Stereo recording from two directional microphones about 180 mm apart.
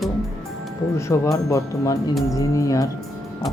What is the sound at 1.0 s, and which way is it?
Speech, 15° left (ahead or behind).